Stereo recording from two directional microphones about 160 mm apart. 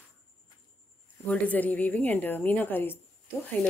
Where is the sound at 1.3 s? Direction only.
10° left (ahead or behind).